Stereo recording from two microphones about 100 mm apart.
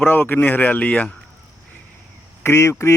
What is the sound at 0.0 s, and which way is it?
Speech, 20° left (ahead or behind).